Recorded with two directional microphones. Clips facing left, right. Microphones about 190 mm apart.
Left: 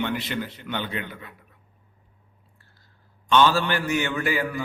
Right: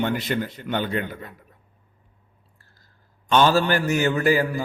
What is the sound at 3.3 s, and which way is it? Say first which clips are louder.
A man's voice: right 2 dB; 45° right (ahead or behind).